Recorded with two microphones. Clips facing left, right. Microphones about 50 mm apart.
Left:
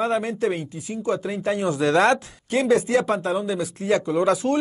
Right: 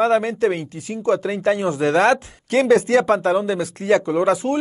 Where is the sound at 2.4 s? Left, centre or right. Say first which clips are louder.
Right 4 dB; right.